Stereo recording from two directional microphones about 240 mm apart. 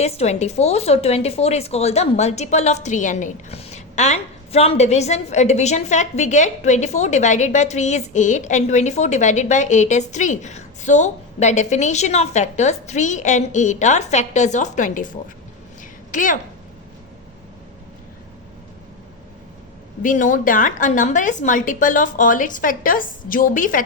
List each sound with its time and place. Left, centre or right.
0.0 s a woman's voice: left
15.8 s a sound: left
20.0 s a woman's voice: left